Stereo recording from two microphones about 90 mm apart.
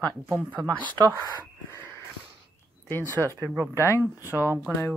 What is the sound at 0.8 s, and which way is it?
Speech, 50° right (ahead or behind).